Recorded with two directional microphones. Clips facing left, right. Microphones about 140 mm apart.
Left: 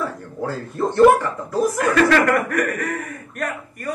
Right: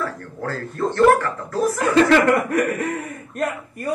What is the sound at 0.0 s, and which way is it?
Speech, 15° left (ahead or behind).